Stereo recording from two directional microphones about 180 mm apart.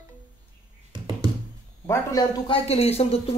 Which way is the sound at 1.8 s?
15° left (ahead or behind).